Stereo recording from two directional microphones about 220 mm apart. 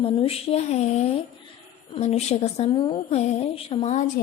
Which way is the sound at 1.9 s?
30° left (ahead or behind).